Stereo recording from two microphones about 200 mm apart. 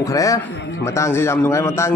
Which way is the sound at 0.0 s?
15° left (ahead or behind).